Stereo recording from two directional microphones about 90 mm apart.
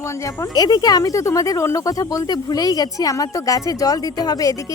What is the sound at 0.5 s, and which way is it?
Speech, 45° left (ahead or behind).